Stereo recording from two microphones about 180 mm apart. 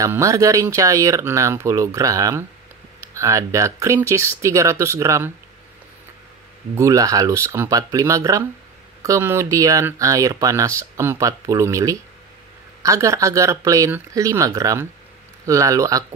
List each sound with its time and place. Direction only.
0.0 s speech: 15° right (ahead or behind)
6.8 s speech: 20° right (ahead or behind)